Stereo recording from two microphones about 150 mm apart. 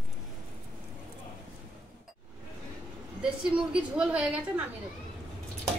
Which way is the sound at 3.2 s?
5° right (ahead or behind).